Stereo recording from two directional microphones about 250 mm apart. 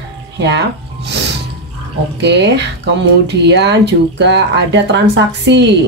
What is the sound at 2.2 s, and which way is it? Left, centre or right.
Speech, right.